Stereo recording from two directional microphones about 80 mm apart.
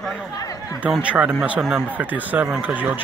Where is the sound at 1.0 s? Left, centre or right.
Centre.